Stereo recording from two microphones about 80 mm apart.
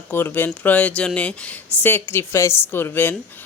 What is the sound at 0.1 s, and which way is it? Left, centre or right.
Speech, left.